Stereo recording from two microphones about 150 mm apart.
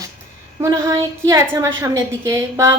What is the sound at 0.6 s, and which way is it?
A woman's voice, 20° right (ahead or behind).